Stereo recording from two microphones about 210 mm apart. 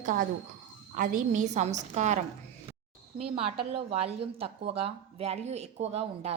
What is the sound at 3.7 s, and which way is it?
Speech, 30° right (ahead or behind).